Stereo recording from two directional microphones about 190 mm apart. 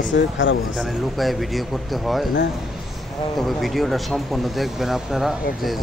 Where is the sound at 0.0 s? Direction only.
75° left (ahead or behind).